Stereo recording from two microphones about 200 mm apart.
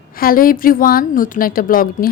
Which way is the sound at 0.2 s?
45° left (ahead or behind).